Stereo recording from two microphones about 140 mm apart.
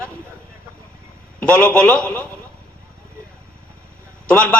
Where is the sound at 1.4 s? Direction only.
5° left (ahead or behind).